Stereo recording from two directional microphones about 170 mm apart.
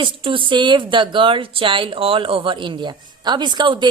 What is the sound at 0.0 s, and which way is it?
Speech, 30° right (ahead or behind).